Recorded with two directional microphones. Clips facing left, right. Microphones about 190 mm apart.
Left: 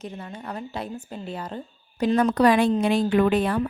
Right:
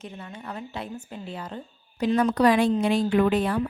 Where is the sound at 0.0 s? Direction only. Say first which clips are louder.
Left 3 dB; 40° left (ahead or behind).